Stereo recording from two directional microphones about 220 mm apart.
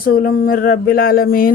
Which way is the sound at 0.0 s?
40° left (ahead or behind).